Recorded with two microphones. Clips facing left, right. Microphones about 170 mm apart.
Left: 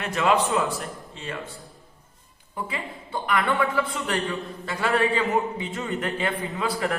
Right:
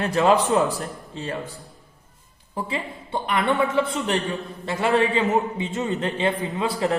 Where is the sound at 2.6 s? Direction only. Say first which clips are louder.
Right 4 dB; 25° right (ahead or behind).